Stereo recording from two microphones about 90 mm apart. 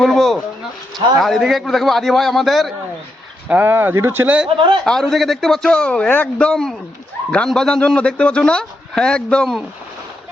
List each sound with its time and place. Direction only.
0.0 s a man's voice: 5° left (ahead or behind)
3.5 s speech: 25° right (ahead or behind)
4.4 s a man's voice: 65° right (ahead or behind)
4.9 s a man's voice: 5° left (ahead or behind)